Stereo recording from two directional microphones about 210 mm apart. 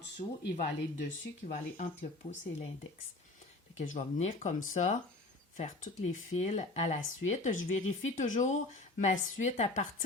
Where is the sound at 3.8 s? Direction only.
35° left (ahead or behind).